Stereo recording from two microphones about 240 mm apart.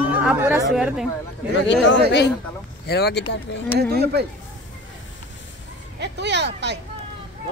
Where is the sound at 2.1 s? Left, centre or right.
Left.